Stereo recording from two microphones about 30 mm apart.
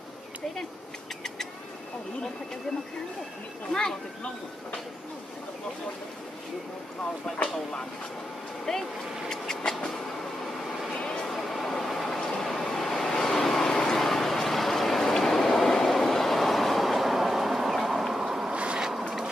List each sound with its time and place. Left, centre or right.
7.3 s speech: left
8.7 s vehicle: centre
11.3 s vehicle: centre
13.7 s a sound: left
13.9 s vehicle: centre
18.5 s a sound: right
18.8 s vehicle: right